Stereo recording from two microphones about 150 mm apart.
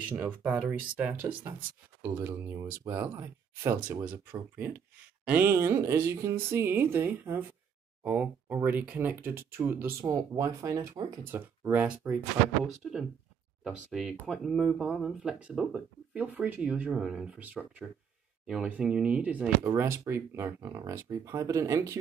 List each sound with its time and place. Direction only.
0.1 s speech: 10° right (ahead or behind)
11.3 s speech: 10° right (ahead or behind)
14.2 s speech: centre (ahead or behind)
19.6 s speech: 20° right (ahead or behind)